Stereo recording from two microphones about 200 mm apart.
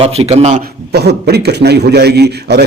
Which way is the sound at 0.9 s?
55° right (ahead or behind).